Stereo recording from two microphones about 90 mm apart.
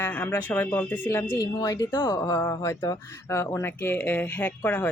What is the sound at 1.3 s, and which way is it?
Speech, 40° left (ahead or behind).